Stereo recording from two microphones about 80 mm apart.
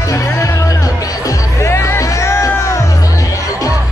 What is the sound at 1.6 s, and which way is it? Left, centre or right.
Music, left.